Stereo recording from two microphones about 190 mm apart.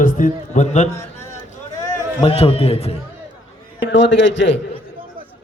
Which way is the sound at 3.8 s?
75° left (ahead or behind).